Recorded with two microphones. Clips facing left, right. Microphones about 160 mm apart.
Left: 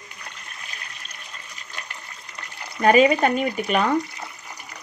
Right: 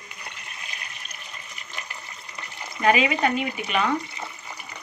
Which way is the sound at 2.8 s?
45° left (ahead or behind).